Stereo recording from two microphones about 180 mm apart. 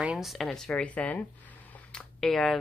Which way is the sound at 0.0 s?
5° right (ahead or behind).